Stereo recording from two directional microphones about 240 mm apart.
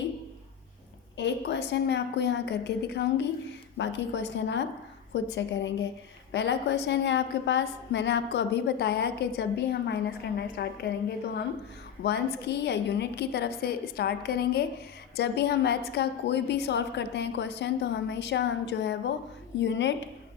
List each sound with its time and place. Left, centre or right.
1.1 s a woman's voice: left
12.0 s a woman's voice: left